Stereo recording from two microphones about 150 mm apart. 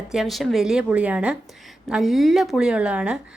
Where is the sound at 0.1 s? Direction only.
Centre (ahead or behind).